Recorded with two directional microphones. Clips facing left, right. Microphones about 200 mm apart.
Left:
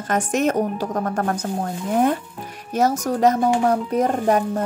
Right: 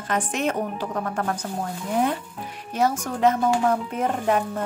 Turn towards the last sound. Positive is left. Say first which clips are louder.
# left 4 dB
turn(degrees=40)  # may be behind; listen again after turning